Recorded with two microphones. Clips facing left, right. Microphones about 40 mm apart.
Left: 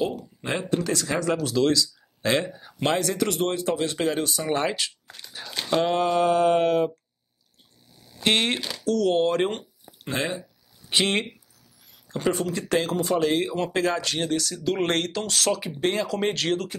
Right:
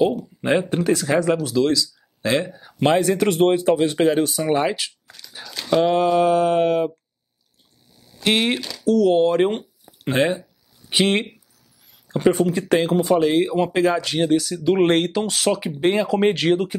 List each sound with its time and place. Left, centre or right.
0.2 s speech: centre
2.8 s speech: centre
5.0 s biting: left
5.7 s speech: centre
8.0 s a sound: centre
8.5 s speech: left
8.8 s speech: centre
10.9 s speech: centre
13.0 s speech: centre